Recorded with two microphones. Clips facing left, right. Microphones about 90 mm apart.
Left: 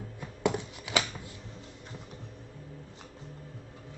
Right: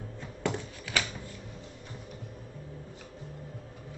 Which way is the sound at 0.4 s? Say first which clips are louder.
Left 3 dB; 15° left (ahead or behind).